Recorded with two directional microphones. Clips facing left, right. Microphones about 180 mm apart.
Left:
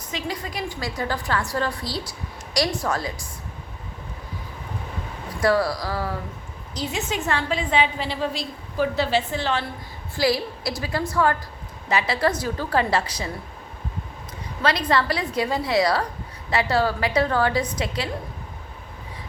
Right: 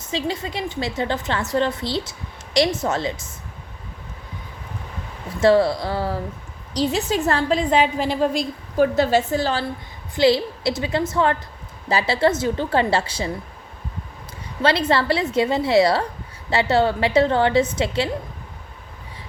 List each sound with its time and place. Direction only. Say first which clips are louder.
0.0 s a woman's voice: right 5 dB; 25° right (ahead or behind)
5.4 s a woman's voice: right 5 dB; 25° right (ahead or behind)
10.2 s a woman's voice: right 5 dB; 25° right (ahead or behind)
14.6 s a woman's voice: right 3 dB; 30° right (ahead or behind)